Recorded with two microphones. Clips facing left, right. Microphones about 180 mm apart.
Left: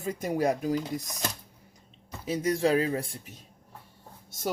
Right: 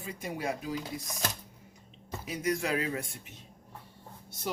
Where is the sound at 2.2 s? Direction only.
30° left (ahead or behind).